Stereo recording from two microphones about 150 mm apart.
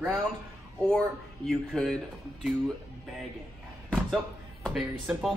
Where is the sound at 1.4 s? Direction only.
5° left (ahead or behind).